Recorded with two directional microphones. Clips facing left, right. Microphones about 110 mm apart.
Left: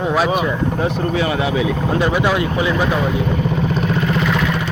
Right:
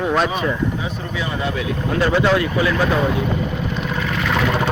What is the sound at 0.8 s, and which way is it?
Speech, 65° left (ahead or behind).